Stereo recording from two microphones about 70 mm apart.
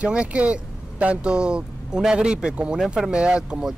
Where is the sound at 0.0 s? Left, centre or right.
Centre.